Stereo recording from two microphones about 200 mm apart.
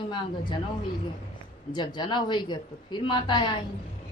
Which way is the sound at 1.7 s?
20° left (ahead or behind).